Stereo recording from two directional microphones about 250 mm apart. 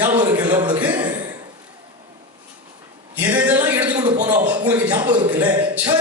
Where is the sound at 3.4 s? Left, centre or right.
Centre.